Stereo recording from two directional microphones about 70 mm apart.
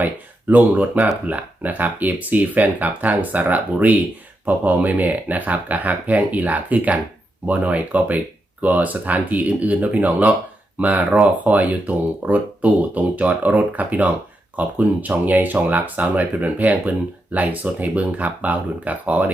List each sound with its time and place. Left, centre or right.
0.0 s speech: right